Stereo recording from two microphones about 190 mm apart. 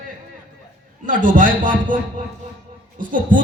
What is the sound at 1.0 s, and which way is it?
Speech, 45° right (ahead or behind).